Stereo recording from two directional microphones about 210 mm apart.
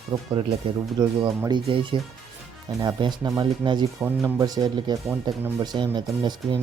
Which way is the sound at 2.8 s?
20° right (ahead or behind).